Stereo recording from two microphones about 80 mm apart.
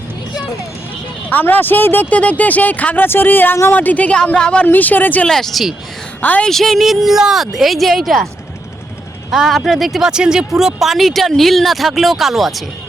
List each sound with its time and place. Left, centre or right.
1.3 s speech: left
5.2 s speech: centre
9.3 s speech: centre